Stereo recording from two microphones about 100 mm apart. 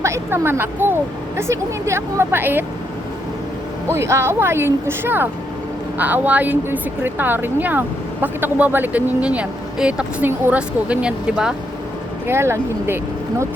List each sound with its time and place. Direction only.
0.0 s speech: 25° right (ahead or behind)
3.8 s speech: 30° right (ahead or behind); by 11.5 s 10° right (ahead or behind)
12.3 s speech: 25° right (ahead or behind)